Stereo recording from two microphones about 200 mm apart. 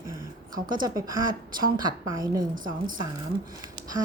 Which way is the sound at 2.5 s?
45° right (ahead or behind).